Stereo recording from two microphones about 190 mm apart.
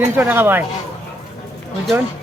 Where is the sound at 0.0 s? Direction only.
10° right (ahead or behind).